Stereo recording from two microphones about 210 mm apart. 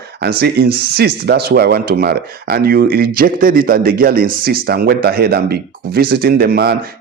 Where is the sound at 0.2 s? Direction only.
50° right (ahead or behind).